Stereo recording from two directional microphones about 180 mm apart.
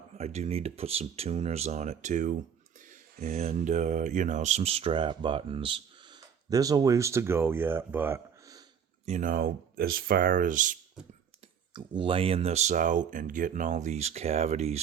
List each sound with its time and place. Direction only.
0.2 s speech: 35° right (ahead or behind); by 8.6 s 15° right (ahead or behind)
9.0 s speech: 45° right (ahead or behind)
11.7 s speech: 30° right (ahead or behind)